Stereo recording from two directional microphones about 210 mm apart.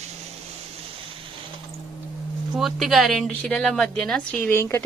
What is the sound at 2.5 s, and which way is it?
A woman's voice, centre (ahead or behind).